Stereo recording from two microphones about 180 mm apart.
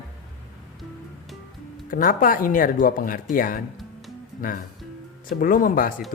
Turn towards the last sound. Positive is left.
turn(degrees=50)  # may be behind; listen again after turning